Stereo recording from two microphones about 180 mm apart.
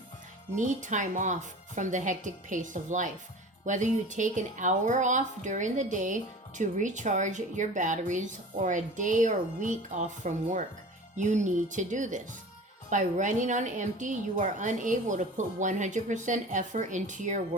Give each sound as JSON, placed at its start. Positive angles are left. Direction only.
{"t": 0.5, "sound": "a woman's voice", "side_deg": -45}